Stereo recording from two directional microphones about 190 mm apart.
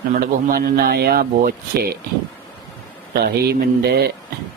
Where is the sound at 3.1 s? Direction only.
55° right (ahead or behind).